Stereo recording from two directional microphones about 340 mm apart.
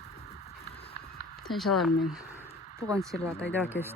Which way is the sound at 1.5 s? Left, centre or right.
Centre.